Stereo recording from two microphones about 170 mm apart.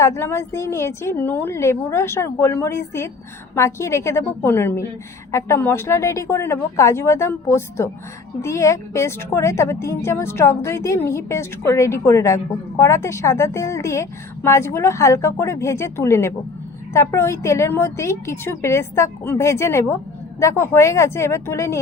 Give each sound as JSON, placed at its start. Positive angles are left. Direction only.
{"t": 0.0, "sound": "a woman's voice", "side_deg": 15}